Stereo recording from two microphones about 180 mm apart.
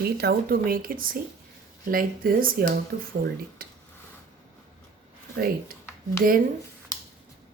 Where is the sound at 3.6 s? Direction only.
55° right (ahead or behind).